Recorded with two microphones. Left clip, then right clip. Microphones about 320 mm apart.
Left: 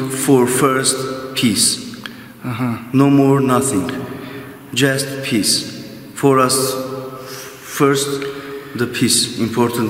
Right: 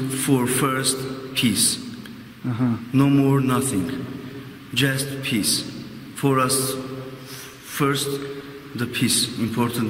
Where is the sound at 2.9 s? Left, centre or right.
Centre.